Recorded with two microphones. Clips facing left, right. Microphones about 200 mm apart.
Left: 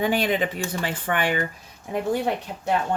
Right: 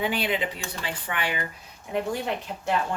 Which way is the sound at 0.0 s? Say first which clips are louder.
Left 4 dB; 45° left (ahead or behind).